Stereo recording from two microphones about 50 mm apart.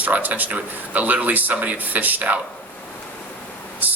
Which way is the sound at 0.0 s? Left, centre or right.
Right.